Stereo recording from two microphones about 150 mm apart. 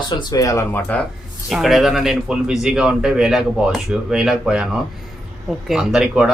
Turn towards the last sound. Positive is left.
turn(degrees=-5)  # may be behind; listen again after turning